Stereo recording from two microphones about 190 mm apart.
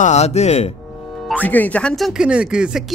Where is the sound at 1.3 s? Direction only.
10° left (ahead or behind).